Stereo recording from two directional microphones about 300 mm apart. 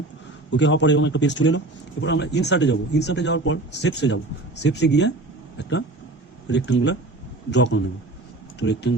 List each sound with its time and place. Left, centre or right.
0.5 s speech: left